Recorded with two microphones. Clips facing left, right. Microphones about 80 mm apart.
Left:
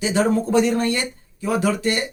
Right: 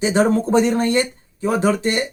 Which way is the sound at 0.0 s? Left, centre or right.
Right.